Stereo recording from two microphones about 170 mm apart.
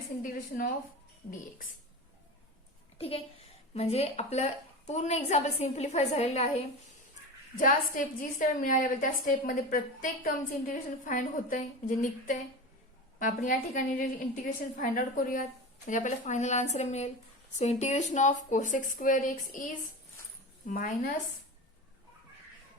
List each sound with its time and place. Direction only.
0.2 s a woman's voice: 50° left (ahead or behind)
3.0 s a woman's voice: 35° left (ahead or behind)
7.5 s a woman's voice: 50° left (ahead or behind)